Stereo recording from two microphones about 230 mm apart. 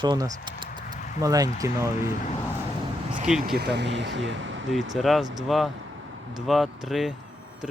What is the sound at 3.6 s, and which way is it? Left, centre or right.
Speech, right.